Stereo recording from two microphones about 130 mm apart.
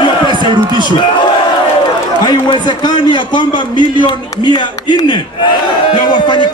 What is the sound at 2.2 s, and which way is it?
A man's voice, 35° left (ahead or behind).